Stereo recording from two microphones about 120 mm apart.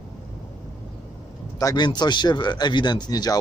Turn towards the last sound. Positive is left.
turn(degrees=35)  # may be behind; listen again after turning